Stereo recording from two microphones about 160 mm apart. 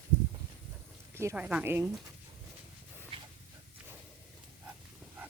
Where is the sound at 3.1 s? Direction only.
35° right (ahead or behind).